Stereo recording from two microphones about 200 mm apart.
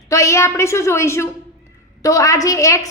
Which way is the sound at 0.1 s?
15° left (ahead or behind).